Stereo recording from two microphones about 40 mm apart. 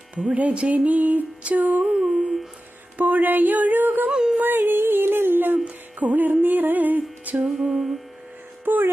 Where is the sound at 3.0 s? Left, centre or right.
Right.